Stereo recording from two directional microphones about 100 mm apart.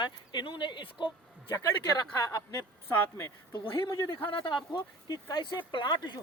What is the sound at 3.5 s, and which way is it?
Speech, 50° left (ahead or behind).